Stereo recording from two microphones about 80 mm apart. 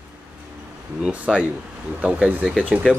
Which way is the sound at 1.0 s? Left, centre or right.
Centre.